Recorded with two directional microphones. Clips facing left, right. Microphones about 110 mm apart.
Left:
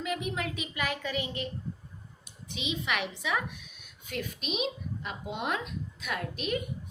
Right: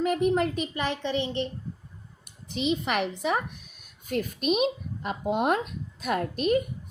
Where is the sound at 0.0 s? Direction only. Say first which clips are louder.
Right 10 dB; 40° right (ahead or behind).